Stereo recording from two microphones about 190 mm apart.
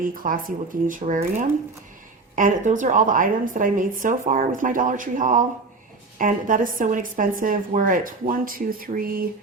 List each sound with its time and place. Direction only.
0.0 s a woman's voice: 45° right (ahead or behind)